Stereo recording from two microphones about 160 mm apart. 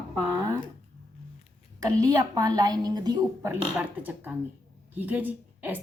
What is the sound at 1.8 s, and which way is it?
A woman's voice, 20° right (ahead or behind).